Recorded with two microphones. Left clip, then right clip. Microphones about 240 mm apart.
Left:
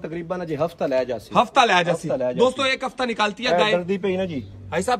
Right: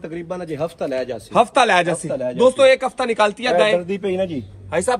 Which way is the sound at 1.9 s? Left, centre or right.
Left.